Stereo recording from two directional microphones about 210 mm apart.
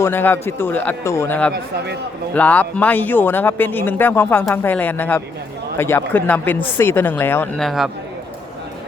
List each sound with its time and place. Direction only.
0.0 s a man's voice: 10° left (ahead or behind)
1.5 s speech: 55° right (ahead or behind)
2.3 s a man's voice: 5° left (ahead or behind)